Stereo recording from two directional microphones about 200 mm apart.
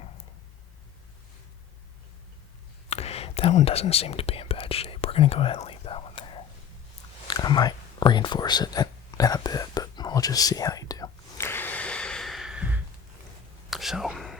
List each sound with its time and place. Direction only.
2.9 s whispering: 30° left (ahead or behind)
7.3 s a sound: 20° left (ahead or behind); by 12.8 s 5° right (ahead or behind)
13.7 s whispering: centre (ahead or behind)